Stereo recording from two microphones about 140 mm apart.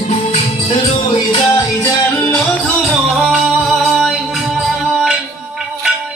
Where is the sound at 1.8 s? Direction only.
20° left (ahead or behind).